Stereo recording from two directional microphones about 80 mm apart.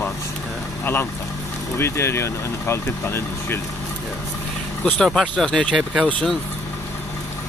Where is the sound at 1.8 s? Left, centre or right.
Left.